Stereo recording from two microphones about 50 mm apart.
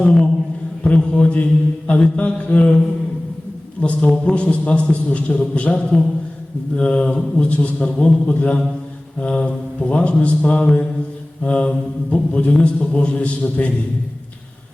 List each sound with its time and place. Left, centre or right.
0.0 s a sound: centre
0.9 s a man's voice: left
3.8 s a man's voice: left